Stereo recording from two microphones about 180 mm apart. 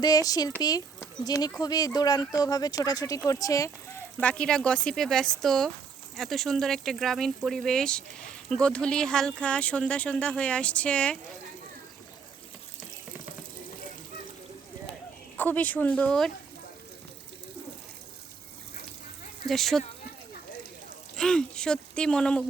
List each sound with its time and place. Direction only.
0.0 s speech: 20° left (ahead or behind)
4.2 s speech: 5° left (ahead or behind)
15.4 s speech: 10° left (ahead or behind)
19.5 s speech: centre (ahead or behind)
21.2 s speech: 5° left (ahead or behind)